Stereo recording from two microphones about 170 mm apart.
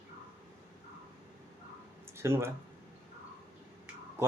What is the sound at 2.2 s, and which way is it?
Speech, 15° right (ahead or behind).